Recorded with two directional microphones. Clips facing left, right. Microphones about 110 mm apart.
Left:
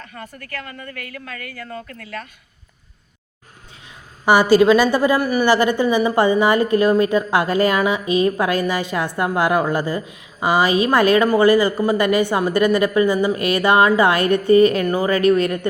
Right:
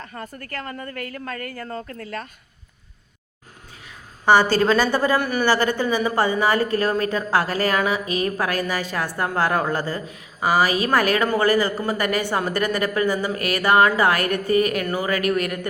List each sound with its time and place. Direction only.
0.0 s a woman's voice: 35° right (ahead or behind)
3.8 s a woman's voice: 15° left (ahead or behind)